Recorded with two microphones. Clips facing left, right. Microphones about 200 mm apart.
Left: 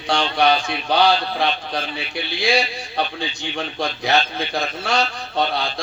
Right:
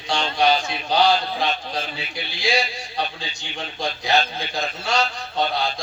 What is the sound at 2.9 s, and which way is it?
A man's voice, 60° left (ahead or behind).